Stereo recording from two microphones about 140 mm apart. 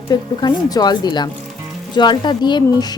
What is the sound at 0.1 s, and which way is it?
A woman's voice, 30° left (ahead or behind).